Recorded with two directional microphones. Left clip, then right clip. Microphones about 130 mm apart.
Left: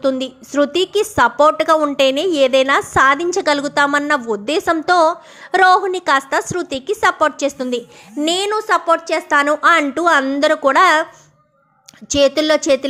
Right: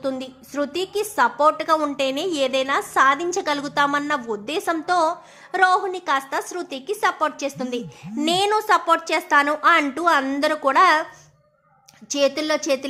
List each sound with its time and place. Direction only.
0.0 s a woman's voice: 35° left (ahead or behind)
8.2 s a woman's voice: 15° left (ahead or behind)
9.3 s a woman's voice: 25° left (ahead or behind)
12.1 s a woman's voice: 30° left (ahead or behind)